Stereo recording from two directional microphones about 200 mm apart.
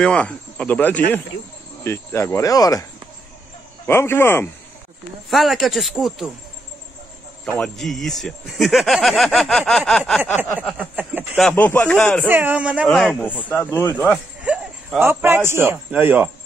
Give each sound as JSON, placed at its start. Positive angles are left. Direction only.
{"t": 0.0, "sound": "speech", "side_deg": 5}
{"t": 5.3, "sound": "speech", "side_deg": 0}
{"t": 7.4, "sound": "speech", "side_deg": 5}
{"t": 11.0, "sound": "a man's voice", "side_deg": -10}
{"t": 11.4, "sound": "speech", "side_deg": 10}
{"t": 12.3, "sound": "a man's voice", "side_deg": -10}
{"t": 14.4, "sound": "speech", "side_deg": -5}